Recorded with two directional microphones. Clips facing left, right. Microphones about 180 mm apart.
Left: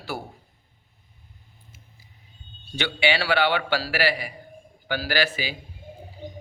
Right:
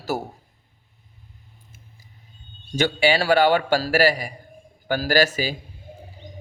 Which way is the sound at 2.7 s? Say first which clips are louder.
Right 5 dB; 40° right (ahead or behind).